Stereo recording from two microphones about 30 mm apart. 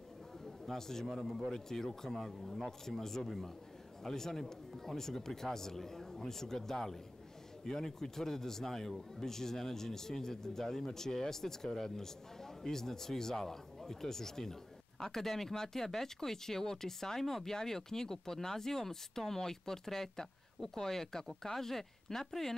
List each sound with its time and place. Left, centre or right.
0.7 s speech: centre